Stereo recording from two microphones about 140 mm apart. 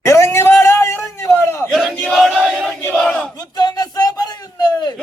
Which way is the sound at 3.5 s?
30° left (ahead or behind).